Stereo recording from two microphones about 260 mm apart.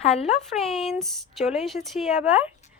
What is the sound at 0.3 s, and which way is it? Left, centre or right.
Speech, centre.